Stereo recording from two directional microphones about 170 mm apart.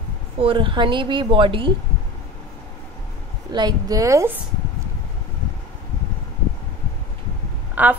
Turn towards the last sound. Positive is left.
turn(degrees=-10)  # may be behind; listen again after turning